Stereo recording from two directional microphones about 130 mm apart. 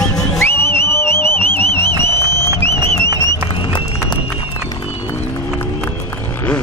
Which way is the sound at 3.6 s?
40° left (ahead or behind).